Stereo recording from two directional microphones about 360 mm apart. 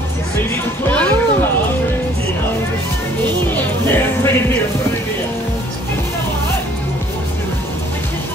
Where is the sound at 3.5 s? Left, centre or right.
Centre.